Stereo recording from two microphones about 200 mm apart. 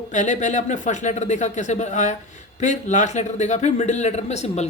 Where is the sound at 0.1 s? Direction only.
40° left (ahead or behind).